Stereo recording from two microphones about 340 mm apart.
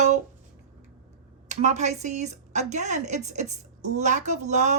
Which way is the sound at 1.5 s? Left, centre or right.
Right.